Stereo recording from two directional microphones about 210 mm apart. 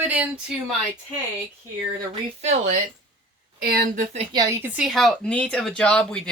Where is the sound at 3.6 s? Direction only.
45° right (ahead or behind).